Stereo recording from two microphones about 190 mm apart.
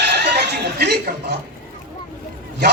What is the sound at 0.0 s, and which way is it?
Music, 60° right (ahead or behind).